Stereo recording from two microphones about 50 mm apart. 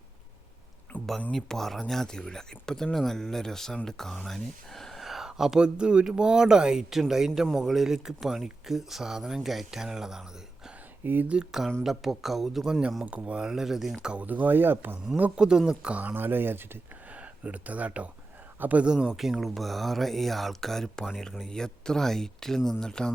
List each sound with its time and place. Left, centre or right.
0.9 s a sound: left
1.3 s speech: centre
11.0 s speech: right
11.8 s speech: centre
13.1 s speech: right; by 14.0 s centre
14.2 s speech: right
15.4 s speech: centre
15.9 s speech: right
16.1 s speech: right
17.1 s speech: right
19.0 s speech: centre